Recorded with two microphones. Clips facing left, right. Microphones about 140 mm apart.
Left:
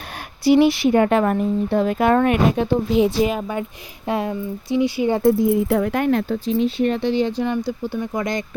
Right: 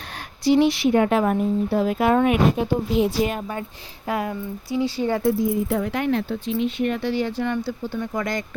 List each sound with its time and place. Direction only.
0.4 s speech: 5° left (ahead or behind)
4.0 s speech: 25° left (ahead or behind)
5.2 s speech: 65° left (ahead or behind)
5.9 s speech: 50° left (ahead or behind); by 7.0 s 30° left (ahead or behind)
7.0 s speech: 20° left (ahead or behind)